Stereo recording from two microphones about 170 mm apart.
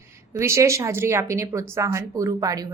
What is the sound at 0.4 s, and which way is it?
Speech, 15° right (ahead or behind).